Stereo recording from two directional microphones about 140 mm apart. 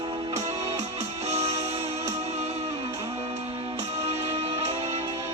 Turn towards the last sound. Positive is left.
turn(degrees=-50)  # may be behind; listen again after turning